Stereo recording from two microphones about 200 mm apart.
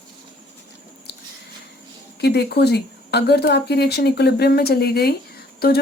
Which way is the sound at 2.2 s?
55° left (ahead or behind).